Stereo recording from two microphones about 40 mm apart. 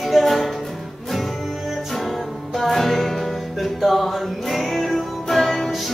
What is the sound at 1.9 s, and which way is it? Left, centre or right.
Music, centre.